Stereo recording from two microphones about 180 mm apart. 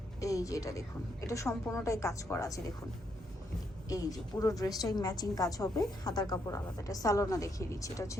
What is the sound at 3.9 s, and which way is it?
A woman's voice, 20° left (ahead or behind).